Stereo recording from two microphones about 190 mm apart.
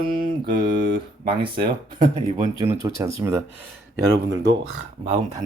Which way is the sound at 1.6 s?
50° right (ahead or behind).